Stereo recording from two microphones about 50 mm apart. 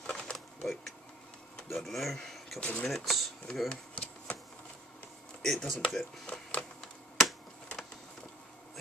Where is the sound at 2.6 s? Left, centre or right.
Left.